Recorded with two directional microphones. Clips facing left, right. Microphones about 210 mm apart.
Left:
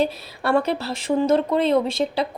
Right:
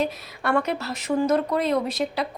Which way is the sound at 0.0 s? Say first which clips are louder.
Left 3 dB; 30° left (ahead or behind).